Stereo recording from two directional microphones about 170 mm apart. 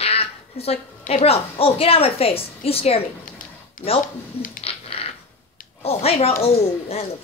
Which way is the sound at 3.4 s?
50° left (ahead or behind).